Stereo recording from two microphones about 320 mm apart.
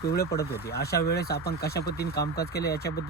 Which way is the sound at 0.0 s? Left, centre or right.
Left.